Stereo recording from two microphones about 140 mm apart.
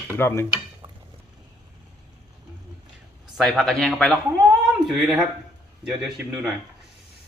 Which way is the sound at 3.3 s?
Centre (ahead or behind).